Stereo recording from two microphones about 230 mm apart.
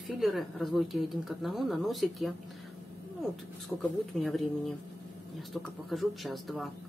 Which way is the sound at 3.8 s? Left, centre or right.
Centre.